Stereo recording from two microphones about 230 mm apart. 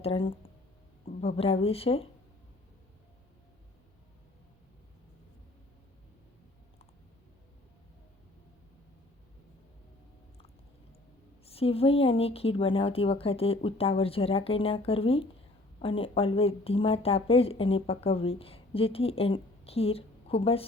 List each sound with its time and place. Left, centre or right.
0.0 s speech: left
11.4 s speech: left